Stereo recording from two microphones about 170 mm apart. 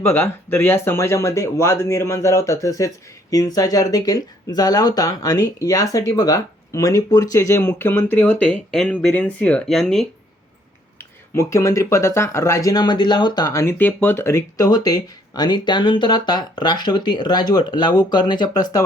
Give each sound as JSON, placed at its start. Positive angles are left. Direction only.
{"t": 0.0, "sound": "speech", "side_deg": 15}
{"t": 11.3, "sound": "speech", "side_deg": 20}